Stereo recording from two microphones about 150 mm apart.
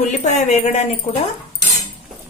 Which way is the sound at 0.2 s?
50° left (ahead or behind).